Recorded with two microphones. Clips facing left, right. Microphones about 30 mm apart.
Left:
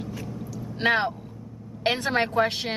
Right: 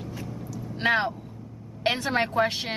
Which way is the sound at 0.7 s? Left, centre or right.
Centre.